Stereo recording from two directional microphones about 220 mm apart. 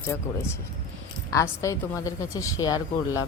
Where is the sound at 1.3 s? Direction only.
15° left (ahead or behind).